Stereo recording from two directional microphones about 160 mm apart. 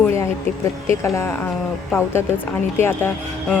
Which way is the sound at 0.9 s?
20° left (ahead or behind).